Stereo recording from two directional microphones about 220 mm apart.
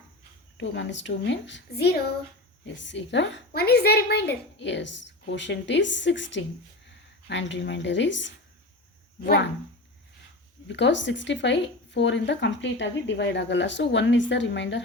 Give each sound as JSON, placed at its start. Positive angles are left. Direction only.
{"t": 0.5, "sound": "a woman's voice", "side_deg": 55}
{"t": 10.7, "sound": "speech", "side_deg": 55}